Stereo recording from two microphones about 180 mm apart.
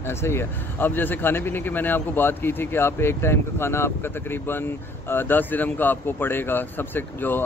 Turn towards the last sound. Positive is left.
turn(degrees=10)  # may be behind; listen again after turning